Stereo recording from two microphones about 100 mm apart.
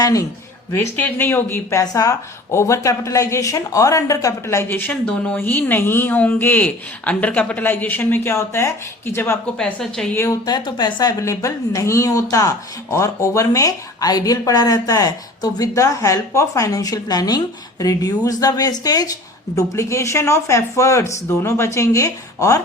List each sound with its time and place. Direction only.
0.0 s speech: 35° left (ahead or behind)
0.9 s a woman's voice: 20° left (ahead or behind)
1.8 s a woman's voice: 35° left (ahead or behind)
9.6 s a woman's voice: 10° left (ahead or behind)
10.2 s speech: 40° left (ahead or behind)
11.2 s speech: 30° left (ahead or behind)